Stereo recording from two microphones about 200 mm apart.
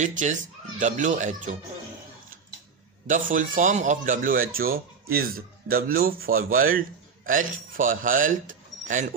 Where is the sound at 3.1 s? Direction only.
40° right (ahead or behind).